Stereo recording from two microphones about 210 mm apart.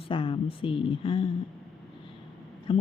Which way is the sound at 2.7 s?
25° left (ahead or behind).